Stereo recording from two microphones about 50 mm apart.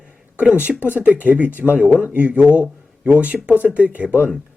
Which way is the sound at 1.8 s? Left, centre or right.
Right.